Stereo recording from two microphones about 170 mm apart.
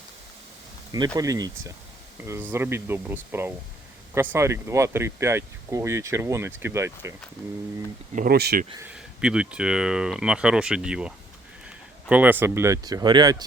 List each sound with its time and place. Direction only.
0.9 s speech: 20° right (ahead or behind)
8.1 s speech: 60° right (ahead or behind)
8.8 s speech: 5° right (ahead or behind); by 13.3 s 25° right (ahead or behind)